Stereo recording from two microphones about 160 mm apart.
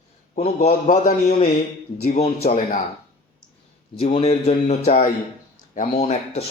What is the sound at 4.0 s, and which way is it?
Speech, 35° left (ahead or behind).